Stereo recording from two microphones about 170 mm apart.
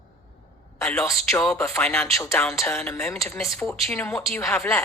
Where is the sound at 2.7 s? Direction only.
15° left (ahead or behind).